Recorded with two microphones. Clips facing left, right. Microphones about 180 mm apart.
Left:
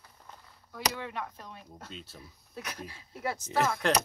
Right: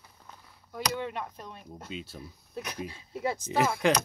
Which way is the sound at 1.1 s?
15° right (ahead or behind).